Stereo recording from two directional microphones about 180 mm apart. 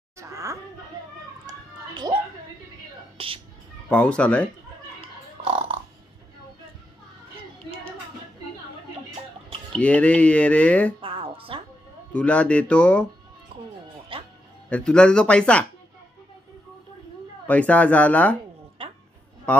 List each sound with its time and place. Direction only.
0.2 s laughter: 15° right (ahead or behind)
1.4 s a sound: 20° right (ahead or behind)
3.2 s speech: 30° right (ahead or behind)
3.9 s speech: 5° left (ahead or behind)
5.4 s burping: 30° right (ahead or behind)
9.8 s speech: 5° left (ahead or behind)
11.0 s music: 30° right (ahead or behind)
12.1 s speech: 5° left (ahead or behind)
14.1 s music: 30° right (ahead or behind)
14.7 s speech: 5° left (ahead or behind)
17.5 s speech: 10° left (ahead or behind)